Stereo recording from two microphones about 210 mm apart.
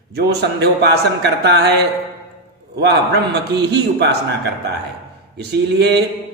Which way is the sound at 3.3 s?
55° right (ahead or behind).